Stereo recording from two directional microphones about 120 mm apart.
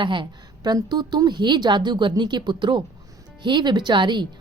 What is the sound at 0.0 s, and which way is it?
Speech, 40° right (ahead or behind).